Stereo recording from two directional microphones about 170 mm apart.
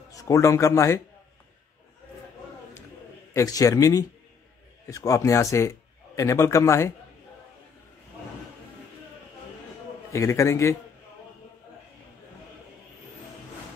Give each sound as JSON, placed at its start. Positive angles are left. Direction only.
{"t": 0.1, "sound": "a man's voice", "side_deg": 20}
{"t": 3.3, "sound": "a man's voice", "side_deg": 20}
{"t": 10.1, "sound": "a man's voice", "side_deg": 15}